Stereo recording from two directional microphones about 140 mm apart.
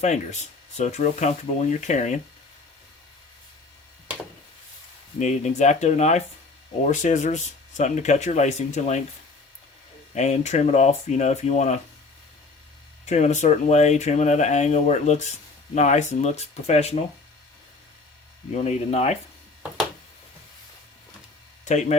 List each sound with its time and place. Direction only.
0.0 s speech: 55° left (ahead or behind)
5.2 s speech: 55° left (ahead or behind)
10.2 s speech: 55° left (ahead or behind)
13.1 s speech: 55° left (ahead or behind)
18.5 s speech: 50° left (ahead or behind)
21.6 s speech: 55° left (ahead or behind)